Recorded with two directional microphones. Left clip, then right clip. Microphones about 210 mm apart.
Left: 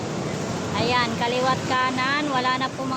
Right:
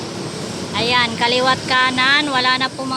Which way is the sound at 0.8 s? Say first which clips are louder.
Right 6 dB; 5° right (ahead or behind).